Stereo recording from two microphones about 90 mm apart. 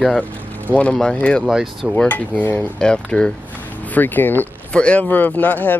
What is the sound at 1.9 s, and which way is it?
Speech, 15° left (ahead or behind).